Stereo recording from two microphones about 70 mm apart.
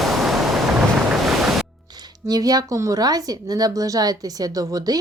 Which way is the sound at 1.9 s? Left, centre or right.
Right.